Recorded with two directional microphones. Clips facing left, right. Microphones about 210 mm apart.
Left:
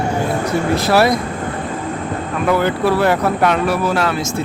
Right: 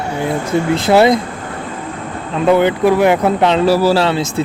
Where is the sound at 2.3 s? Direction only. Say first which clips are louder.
Right 5 dB; 25° right (ahead or behind).